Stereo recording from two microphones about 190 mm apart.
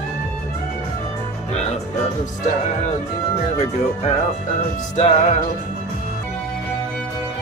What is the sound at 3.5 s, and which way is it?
Speech, 35° left (ahead or behind).